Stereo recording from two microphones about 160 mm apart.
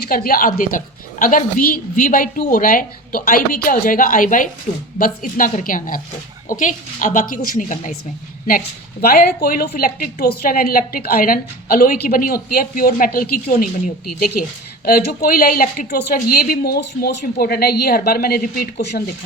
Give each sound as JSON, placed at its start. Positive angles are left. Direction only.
{"t": 0.1, "sound": "a woman's voice", "side_deg": 65}
{"t": 8.4, "sound": "a woman's voice", "side_deg": 70}